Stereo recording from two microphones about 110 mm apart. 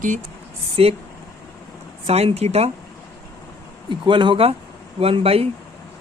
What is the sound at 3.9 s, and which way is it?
Speech, 50° right (ahead or behind).